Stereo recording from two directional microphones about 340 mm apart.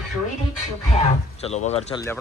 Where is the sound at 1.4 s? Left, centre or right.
Centre.